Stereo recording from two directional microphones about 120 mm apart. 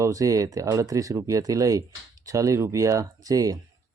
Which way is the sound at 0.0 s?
25° right (ahead or behind).